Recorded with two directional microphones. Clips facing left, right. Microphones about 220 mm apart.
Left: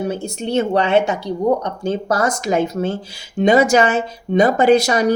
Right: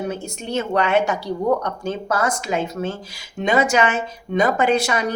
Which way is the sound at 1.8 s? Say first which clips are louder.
Left 4 dB; 35° left (ahead or behind).